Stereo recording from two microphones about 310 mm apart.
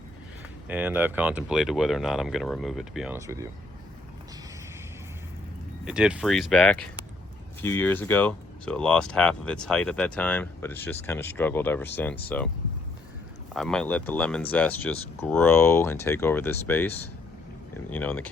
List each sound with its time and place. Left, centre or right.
0.7 s speech: centre
5.8 s speech: centre
13.5 s speech: centre